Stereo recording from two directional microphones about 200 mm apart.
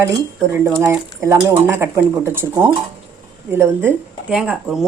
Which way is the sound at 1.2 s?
10° right (ahead or behind).